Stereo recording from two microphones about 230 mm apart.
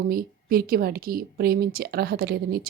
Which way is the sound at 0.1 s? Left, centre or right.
Right.